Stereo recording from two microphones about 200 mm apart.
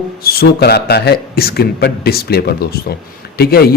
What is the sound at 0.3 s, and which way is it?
A man's voice, 55° left (ahead or behind).